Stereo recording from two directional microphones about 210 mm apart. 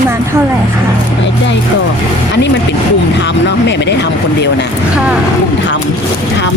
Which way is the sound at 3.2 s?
55° left (ahead or behind).